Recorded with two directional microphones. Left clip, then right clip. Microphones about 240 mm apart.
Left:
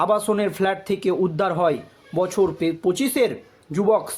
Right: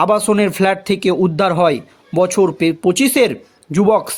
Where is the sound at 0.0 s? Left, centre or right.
Right.